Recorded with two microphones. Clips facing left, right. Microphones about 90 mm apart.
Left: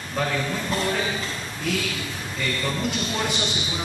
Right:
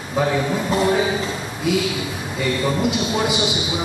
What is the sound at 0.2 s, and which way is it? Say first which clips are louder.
A man's voice: right 6 dB; 20° right (ahead or behind).